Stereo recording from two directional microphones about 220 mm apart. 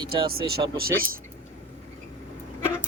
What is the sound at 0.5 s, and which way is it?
Speech, 45° right (ahead or behind).